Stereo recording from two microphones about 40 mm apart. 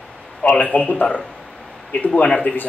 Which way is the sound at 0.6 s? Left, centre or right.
Left.